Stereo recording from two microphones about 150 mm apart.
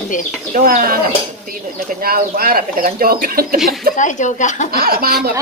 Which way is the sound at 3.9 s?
55° left (ahead or behind).